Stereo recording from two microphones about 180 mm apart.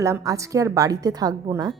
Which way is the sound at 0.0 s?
15° right (ahead or behind).